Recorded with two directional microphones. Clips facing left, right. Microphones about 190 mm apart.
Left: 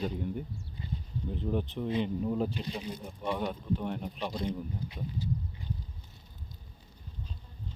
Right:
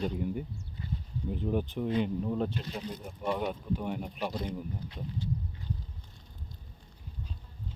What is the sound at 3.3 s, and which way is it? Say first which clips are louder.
Speech: even; 5° right (ahead or behind).